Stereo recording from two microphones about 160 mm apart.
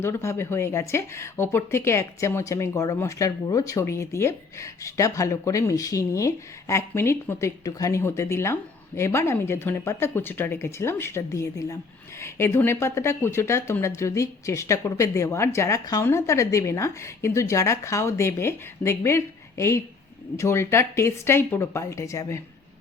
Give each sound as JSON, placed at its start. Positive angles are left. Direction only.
{"t": 0.0, "sound": "speech", "side_deg": 15}